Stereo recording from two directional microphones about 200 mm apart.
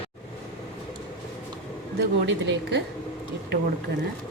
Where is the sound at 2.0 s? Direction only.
60° right (ahead or behind).